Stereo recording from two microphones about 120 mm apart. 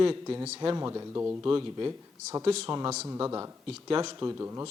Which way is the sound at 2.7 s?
25° right (ahead or behind).